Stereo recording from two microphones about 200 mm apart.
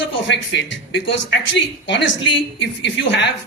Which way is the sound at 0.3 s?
60° left (ahead or behind).